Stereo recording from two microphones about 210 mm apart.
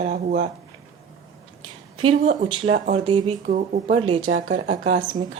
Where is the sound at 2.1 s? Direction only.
35° right (ahead or behind).